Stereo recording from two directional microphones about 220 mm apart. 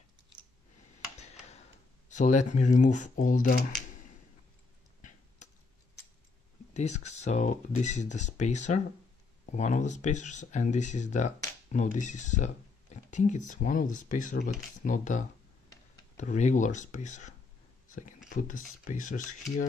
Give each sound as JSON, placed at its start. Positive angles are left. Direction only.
{"t": 2.0, "sound": "speech", "side_deg": 35}
{"t": 6.7, "sound": "speech", "side_deg": 30}
{"t": 17.8, "sound": "a sound", "side_deg": 35}
{"t": 18.3, "sound": "speech", "side_deg": 35}